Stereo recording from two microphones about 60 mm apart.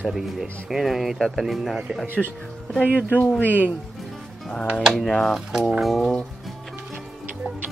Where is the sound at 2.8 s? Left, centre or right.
Right.